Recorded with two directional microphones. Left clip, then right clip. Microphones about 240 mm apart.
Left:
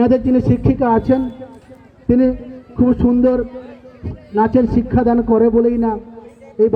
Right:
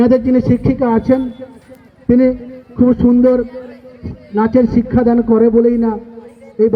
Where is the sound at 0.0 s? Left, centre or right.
Right.